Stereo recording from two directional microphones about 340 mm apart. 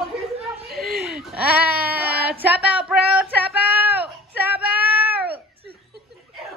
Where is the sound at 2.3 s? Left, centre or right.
Centre.